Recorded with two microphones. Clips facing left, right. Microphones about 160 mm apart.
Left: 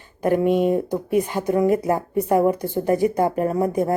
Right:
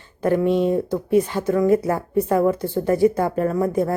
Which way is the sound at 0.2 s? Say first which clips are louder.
Even; 15° left (ahead or behind).